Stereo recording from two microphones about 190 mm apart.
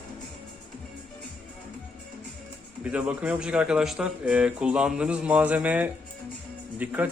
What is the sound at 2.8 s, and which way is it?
Speech, 5° right (ahead or behind).